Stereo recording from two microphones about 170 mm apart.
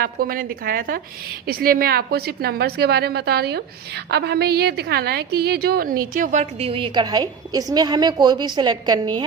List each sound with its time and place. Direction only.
0.0 s a woman's voice: 60° right (ahead or behind); by 9.2 s 25° right (ahead or behind)